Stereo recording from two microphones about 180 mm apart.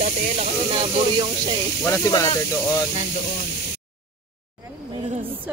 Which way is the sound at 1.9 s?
20° left (ahead or behind).